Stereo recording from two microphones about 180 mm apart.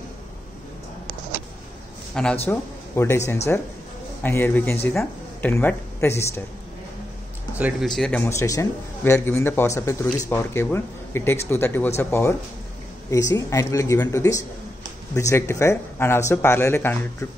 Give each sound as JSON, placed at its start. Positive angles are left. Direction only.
{"t": 2.1, "sound": "speech", "side_deg": 5}
{"t": 2.5, "sound": "speech", "side_deg": 15}
{"t": 7.5, "sound": "speech", "side_deg": -10}
{"t": 7.9, "sound": "speech", "side_deg": 0}
{"t": 8.3, "sound": "speech", "side_deg": 15}